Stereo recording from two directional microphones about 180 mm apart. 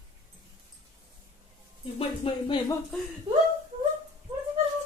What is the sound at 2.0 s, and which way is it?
Speech, 30° left (ahead or behind).